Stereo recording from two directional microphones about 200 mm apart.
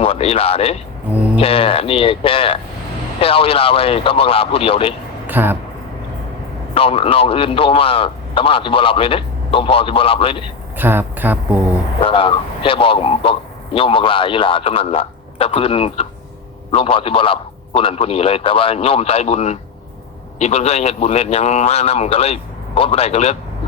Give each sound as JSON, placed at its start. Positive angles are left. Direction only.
{"t": 0.0, "sound": "speech", "side_deg": 30}
{"t": 5.2, "sound": "a sound", "side_deg": -10}
{"t": 6.7, "sound": "speech", "side_deg": 30}
{"t": 10.8, "sound": "speech", "side_deg": -10}
{"t": 11.9, "sound": "a man's voice", "side_deg": 25}